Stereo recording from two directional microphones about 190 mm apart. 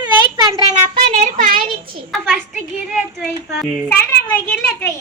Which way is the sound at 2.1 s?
Centre (ahead or behind).